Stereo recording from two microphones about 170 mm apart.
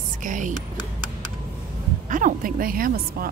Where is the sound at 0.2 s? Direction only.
50° right (ahead or behind).